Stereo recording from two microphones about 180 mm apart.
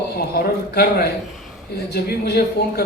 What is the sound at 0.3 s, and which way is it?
Speech, 60° left (ahead or behind).